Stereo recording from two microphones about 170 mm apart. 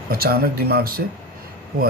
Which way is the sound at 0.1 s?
65° right (ahead or behind).